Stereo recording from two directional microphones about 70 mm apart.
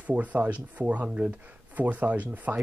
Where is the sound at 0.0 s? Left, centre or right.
Right.